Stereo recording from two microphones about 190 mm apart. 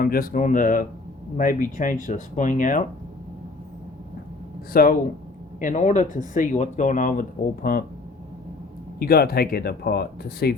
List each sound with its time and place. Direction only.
0.0 s speech: 50° left (ahead or behind)
4.7 s speech: 50° left (ahead or behind)
9.0 s speech: 55° left (ahead or behind)